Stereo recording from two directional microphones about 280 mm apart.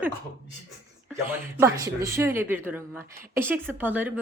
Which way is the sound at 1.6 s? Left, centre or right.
Centre.